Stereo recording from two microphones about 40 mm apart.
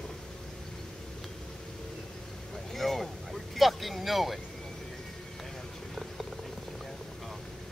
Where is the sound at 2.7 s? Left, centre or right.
Centre.